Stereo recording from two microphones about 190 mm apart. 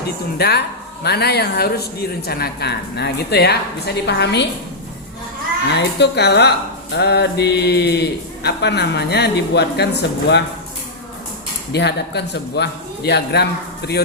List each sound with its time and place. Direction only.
0.3 s speech: 60° left (ahead or behind)
5.6 s speech: 65° left (ahead or behind)
11.7 s speech: 60° left (ahead or behind)